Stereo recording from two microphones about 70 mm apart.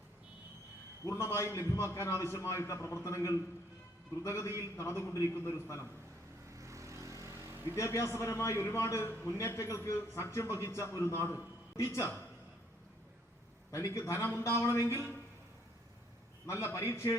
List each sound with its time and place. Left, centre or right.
1.0 s a man's voice: left
6.6 s vehicle: right
7.8 s a man's voice: left
13.7 s a man's voice: left
16.5 s a man's voice: left